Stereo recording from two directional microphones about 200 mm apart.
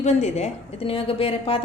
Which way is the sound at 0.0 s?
35° left (ahead or behind).